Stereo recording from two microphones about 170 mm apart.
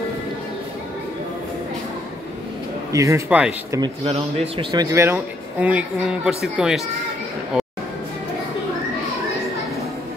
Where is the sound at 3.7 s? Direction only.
30° right (ahead or behind).